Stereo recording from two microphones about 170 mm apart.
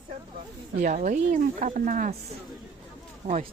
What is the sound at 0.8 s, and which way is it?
Speech, 50° right (ahead or behind).